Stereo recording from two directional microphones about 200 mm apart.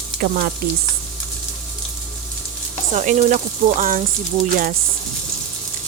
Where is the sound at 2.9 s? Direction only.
40° right (ahead or behind).